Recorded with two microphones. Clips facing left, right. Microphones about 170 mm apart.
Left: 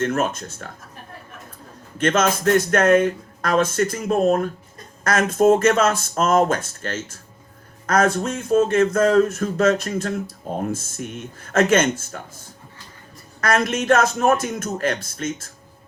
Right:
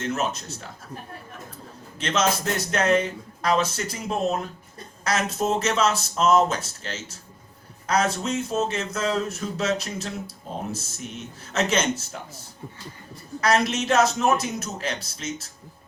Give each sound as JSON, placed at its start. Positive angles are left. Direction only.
{"t": 0.0, "sound": "speech", "side_deg": 50}
{"t": 2.0, "sound": "speech", "side_deg": 50}
{"t": 13.4, "sound": "speech", "side_deg": 50}